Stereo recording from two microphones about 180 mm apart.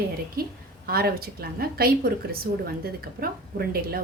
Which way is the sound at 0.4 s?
55° right (ahead or behind).